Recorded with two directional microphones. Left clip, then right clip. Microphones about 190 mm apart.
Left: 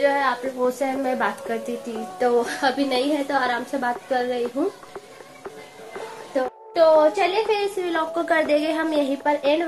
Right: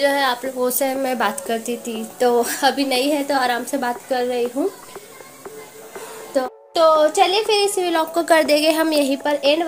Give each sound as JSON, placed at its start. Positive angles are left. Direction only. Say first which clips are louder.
{"t": 0.0, "sound": "a woman's voice", "louder": "right 2 dB", "side_deg": -45}
{"t": 2.1, "sound": "a woman's voice", "louder": "right 3 dB", "side_deg": -35}
{"t": 6.3, "sound": "a woman's voice", "louder": "right 2 dB", "side_deg": -40}